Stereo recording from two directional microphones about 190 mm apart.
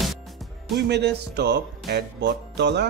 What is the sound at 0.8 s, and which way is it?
Speech, 60° right (ahead or behind).